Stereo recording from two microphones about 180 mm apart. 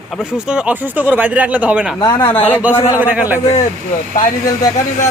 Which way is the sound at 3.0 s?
10° right (ahead or behind).